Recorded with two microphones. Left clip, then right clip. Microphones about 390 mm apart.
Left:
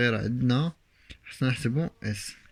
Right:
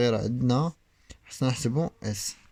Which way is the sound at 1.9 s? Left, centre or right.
Centre.